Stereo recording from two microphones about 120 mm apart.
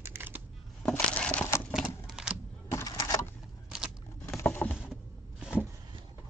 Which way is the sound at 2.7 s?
30° left (ahead or behind).